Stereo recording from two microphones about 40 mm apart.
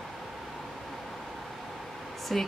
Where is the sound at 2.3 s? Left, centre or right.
Centre.